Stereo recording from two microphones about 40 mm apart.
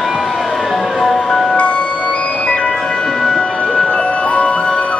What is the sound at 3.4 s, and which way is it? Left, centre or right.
Music, left.